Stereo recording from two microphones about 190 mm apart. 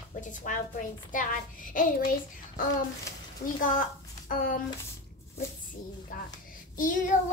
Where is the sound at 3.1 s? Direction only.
15° left (ahead or behind).